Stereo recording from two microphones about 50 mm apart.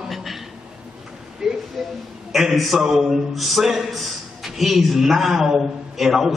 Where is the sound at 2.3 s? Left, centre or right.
Centre.